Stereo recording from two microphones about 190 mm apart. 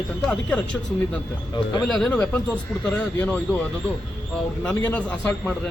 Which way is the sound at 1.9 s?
5° left (ahead or behind).